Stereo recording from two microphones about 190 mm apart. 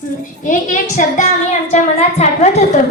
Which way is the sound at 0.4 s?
45° left (ahead or behind).